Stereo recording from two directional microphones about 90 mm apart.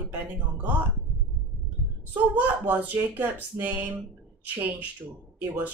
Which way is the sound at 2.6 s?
20° right (ahead or behind).